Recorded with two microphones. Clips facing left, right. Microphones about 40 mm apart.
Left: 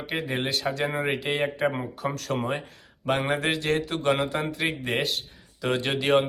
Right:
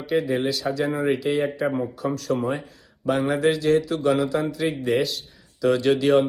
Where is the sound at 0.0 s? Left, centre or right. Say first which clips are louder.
Right 6 dB; left.